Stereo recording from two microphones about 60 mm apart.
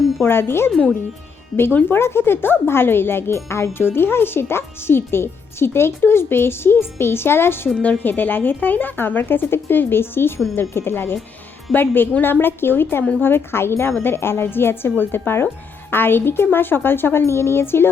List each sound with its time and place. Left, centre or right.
0.3 s speech: left
7.8 s speech: left